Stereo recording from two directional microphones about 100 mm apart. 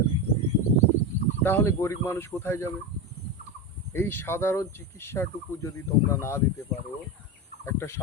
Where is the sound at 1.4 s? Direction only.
25° left (ahead or behind).